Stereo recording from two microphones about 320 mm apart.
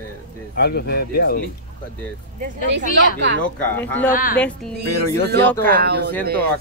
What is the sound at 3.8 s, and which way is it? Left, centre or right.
Speech, centre.